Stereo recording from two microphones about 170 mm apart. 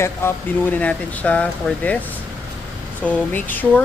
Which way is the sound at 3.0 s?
10° left (ahead or behind).